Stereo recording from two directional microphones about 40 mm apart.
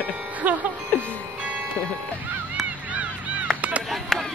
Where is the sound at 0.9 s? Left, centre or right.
Left.